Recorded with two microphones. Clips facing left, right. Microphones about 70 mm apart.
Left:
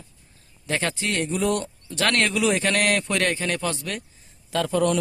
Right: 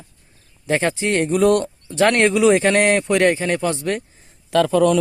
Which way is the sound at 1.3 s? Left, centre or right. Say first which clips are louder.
Right 10 dB; right.